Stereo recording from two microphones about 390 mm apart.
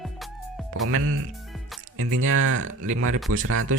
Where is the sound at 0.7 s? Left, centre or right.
Right.